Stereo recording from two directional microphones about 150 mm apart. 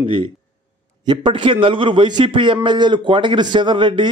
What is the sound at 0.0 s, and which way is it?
A man's voice, 35° right (ahead or behind).